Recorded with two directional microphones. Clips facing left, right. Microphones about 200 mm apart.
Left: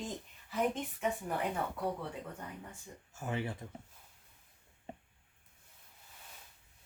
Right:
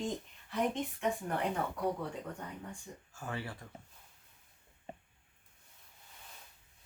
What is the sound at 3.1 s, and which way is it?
Speech, 20° left (ahead or behind).